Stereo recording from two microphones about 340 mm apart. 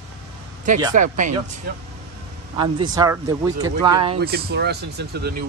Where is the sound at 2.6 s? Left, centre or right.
Centre.